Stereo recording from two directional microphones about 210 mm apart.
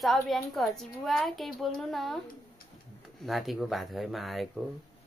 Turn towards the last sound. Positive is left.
turn(degrees=0)  # may be behind; listen again after turning